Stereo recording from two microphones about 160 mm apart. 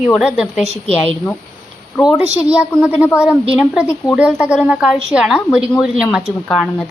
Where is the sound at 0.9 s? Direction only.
40° left (ahead or behind).